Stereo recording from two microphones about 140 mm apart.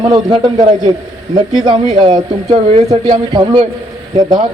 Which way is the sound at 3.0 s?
30° right (ahead or behind).